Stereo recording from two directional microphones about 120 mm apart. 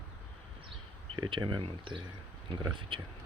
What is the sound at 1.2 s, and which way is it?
Speech, 40° right (ahead or behind).